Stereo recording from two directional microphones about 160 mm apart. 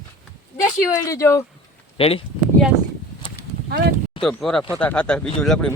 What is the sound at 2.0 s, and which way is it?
Speech, 35° left (ahead or behind).